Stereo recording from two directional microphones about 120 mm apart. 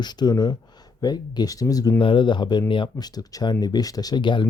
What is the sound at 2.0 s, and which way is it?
Speech, 45° left (ahead or behind).